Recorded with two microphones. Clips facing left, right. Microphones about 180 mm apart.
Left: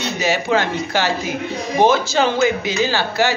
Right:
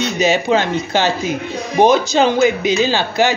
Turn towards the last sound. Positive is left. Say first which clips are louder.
# right 3 dB
turn(degrees=-20)  # may be behind; listen again after turning